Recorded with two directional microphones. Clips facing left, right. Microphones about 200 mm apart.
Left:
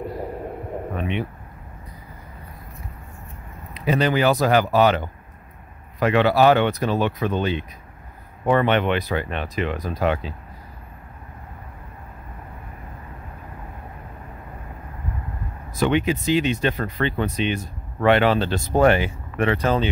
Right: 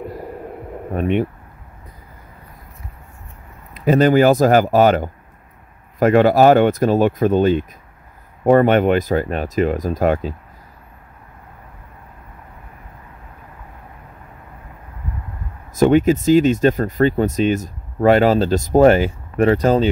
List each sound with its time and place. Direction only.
0.9 s speech: 45° right (ahead or behind)
3.7 s speech: 45° right (ahead or behind)
15.7 s speech: 45° right (ahead or behind)